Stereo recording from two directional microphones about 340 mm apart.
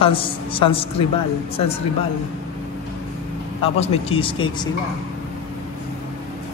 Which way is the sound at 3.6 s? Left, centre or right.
Centre.